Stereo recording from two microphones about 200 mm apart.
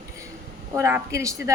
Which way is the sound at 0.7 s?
15° right (ahead or behind).